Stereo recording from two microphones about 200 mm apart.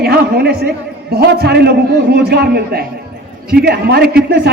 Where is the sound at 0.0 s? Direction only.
50° right (ahead or behind).